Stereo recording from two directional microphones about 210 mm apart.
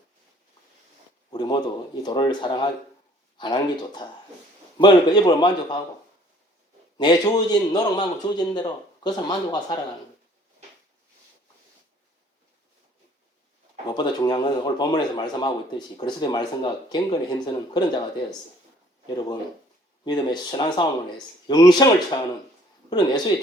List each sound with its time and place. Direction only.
1.3 s a man's voice: 20° left (ahead or behind)
7.0 s a man's voice: 20° left (ahead or behind)
13.8 s a man's voice: 20° left (ahead or behind)
19.0 s a man's voice: 20° left (ahead or behind)